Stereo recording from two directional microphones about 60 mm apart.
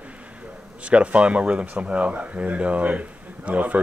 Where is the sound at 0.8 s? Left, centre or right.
Right.